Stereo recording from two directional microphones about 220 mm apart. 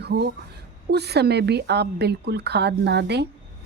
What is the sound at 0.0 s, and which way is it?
A woman's voice, 50° right (ahead or behind).